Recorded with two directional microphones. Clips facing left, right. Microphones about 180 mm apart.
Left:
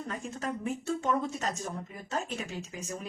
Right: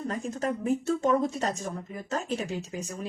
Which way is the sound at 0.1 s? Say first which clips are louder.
Right 4 dB; 40° right (ahead or behind).